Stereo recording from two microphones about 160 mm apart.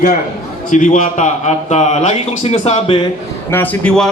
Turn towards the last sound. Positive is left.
turn(degrees=5)  # may be behind; listen again after turning